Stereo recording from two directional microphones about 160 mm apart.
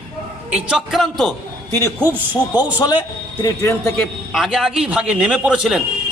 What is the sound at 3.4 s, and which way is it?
Speech, 20° left (ahead or behind).